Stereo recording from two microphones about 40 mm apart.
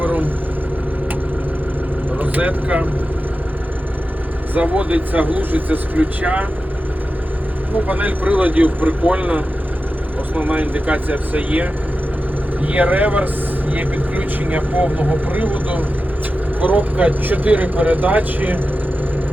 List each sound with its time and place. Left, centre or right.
0.0 s vehicle: right
2.1 s speech: right
4.6 s speech: right
6.0 s speech: right
7.9 s speech: right
10.4 s speech: right